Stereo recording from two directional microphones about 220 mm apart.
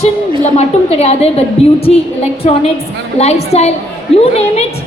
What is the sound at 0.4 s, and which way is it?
A woman's voice, 30° left (ahead or behind).